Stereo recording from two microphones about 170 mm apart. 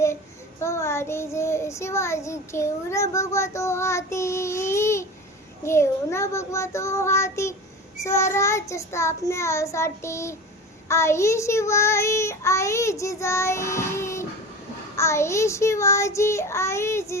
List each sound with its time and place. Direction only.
0.6 s child singing: 15° left (ahead or behind)